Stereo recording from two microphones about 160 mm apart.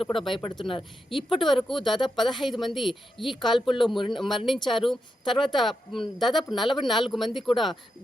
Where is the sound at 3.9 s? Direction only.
30° left (ahead or behind).